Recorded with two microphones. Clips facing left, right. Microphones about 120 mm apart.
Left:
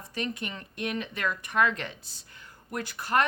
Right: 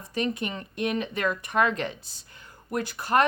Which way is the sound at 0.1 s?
20° right (ahead or behind).